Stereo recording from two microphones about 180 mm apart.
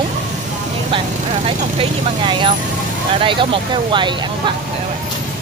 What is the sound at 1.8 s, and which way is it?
Speech, 30° right (ahead or behind).